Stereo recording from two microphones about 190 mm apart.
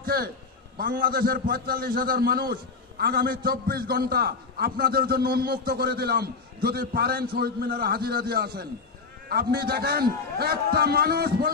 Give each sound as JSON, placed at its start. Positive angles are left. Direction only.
{"t": 0.0, "sound": "a man's voice", "side_deg": -55}